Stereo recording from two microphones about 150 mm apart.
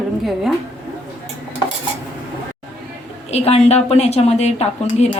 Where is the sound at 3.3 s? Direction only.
45° left (ahead or behind).